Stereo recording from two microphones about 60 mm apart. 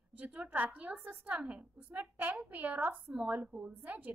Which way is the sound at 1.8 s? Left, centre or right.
Right.